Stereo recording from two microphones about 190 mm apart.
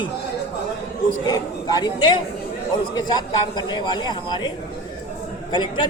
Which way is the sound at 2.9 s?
20° left (ahead or behind).